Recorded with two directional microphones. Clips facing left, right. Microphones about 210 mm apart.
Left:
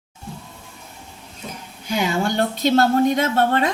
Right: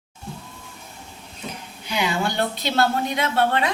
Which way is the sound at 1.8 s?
45° left (ahead or behind).